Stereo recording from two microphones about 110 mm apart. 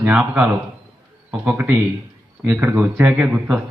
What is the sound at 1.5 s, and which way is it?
A man's voice, 20° right (ahead or behind).